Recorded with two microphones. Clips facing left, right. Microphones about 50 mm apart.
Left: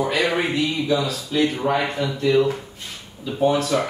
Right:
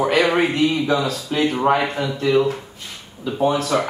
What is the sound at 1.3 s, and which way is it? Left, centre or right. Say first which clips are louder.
Speech: left 1 dB; right.